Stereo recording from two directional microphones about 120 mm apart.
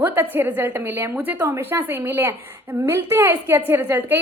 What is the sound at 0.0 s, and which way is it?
A woman's voice, 15° right (ahead or behind).